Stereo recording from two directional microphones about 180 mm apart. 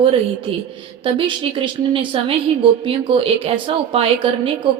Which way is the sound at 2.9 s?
30° right (ahead or behind).